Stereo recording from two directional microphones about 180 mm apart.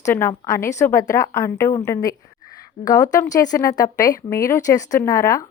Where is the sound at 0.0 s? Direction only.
15° left (ahead or behind).